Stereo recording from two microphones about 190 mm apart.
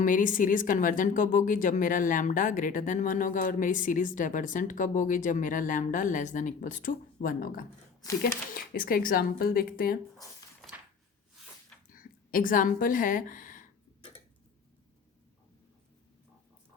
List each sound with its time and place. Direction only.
0.0 s a woman's voice: 45° left (ahead or behind)
11.9 s a woman's voice: 45° left (ahead or behind)